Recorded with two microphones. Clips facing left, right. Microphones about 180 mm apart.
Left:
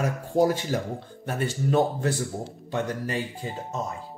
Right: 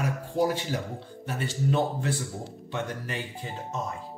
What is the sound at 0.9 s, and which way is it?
Speech, 45° left (ahead or behind).